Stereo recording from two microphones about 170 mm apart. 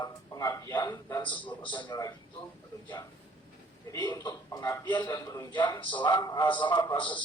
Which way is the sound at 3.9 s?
20° left (ahead or behind).